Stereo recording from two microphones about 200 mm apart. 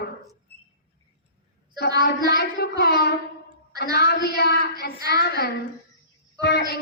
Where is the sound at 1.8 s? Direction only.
55° left (ahead or behind).